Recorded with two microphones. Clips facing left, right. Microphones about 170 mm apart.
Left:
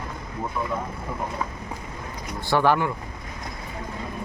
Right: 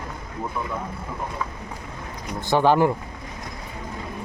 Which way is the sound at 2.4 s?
20° right (ahead or behind).